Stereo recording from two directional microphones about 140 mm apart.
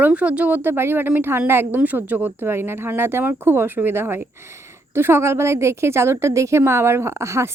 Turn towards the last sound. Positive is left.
turn(degrees=-20)  # may be behind; listen again after turning